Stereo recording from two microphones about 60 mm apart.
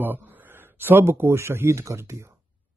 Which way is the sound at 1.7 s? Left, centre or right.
Right.